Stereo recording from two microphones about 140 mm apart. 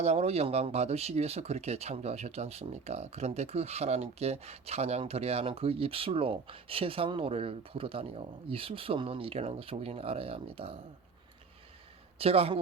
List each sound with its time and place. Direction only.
0.0 s speech: 50° right (ahead or behind)
12.2 s speech: 45° right (ahead or behind)